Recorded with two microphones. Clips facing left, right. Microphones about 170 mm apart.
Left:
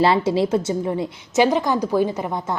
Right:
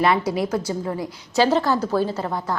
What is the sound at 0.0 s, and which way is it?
A woman's voice, 30° left (ahead or behind).